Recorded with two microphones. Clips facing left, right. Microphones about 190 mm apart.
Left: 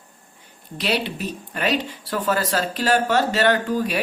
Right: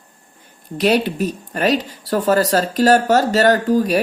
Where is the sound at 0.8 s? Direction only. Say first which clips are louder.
Right 8 dB; 45° right (ahead or behind).